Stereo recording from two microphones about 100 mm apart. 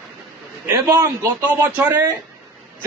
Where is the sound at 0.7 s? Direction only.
35° right (ahead or behind).